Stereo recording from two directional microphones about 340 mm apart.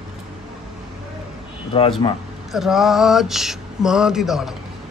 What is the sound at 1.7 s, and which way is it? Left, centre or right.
Speech, centre.